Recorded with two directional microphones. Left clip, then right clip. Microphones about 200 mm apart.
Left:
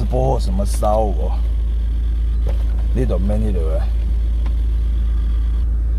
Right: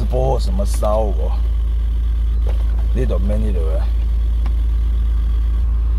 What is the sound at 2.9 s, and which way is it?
Speech, 15° left (ahead or behind).